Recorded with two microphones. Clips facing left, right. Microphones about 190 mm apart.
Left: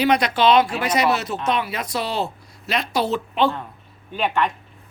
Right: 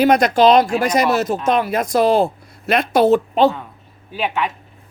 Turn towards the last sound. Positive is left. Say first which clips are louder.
# even
turn(degrees=-5)  # may be behind; listen again after turning